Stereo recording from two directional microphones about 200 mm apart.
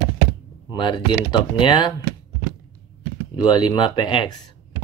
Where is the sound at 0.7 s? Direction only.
25° left (ahead or behind).